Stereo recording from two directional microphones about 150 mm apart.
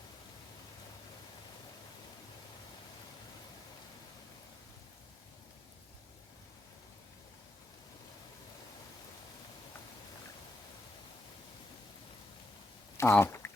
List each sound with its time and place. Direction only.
13.0 s speech: 20° left (ahead or behind)